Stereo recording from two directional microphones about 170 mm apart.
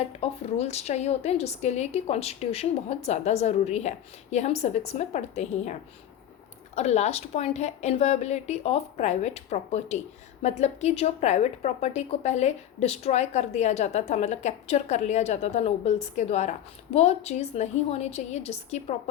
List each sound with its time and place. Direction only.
0.2 s a woman's voice: 40° left (ahead or behind)
6.7 s a woman's voice: 40° left (ahead or behind)